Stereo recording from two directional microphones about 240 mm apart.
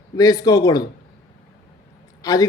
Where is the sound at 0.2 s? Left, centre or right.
Centre.